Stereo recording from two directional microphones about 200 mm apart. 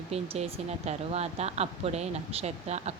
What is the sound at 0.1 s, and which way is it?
Speech, 30° right (ahead or behind).